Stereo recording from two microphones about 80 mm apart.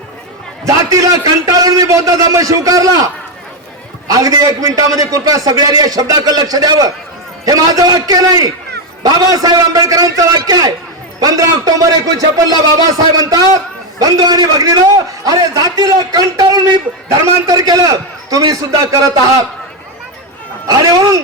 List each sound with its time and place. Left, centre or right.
0.6 s a man's voice: right
4.1 s a man's voice: right
20.7 s speech: right